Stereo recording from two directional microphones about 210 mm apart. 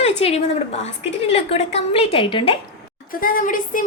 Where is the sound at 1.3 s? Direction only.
30° left (ahead or behind).